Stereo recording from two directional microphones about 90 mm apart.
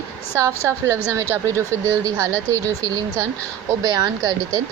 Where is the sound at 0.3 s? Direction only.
35° right (ahead or behind).